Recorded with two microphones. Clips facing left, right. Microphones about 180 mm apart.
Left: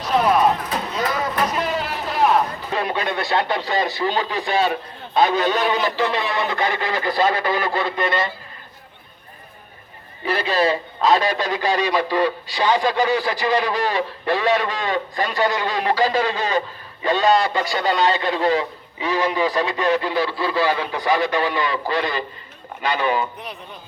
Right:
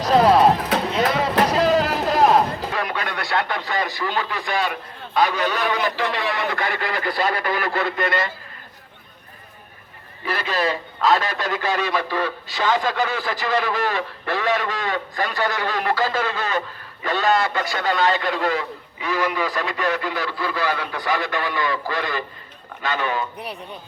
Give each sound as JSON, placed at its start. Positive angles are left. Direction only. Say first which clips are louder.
{"t": 0.0, "sound": "music", "louder": "right 3 dB", "side_deg": -35}
{"t": 2.7, "sound": "speech", "louder": "left 8 dB", "side_deg": 25}
{"t": 10.3, "sound": "speech", "louder": "left 4 dB", "side_deg": 20}